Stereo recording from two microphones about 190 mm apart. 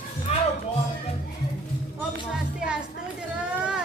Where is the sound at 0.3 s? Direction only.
35° left (ahead or behind).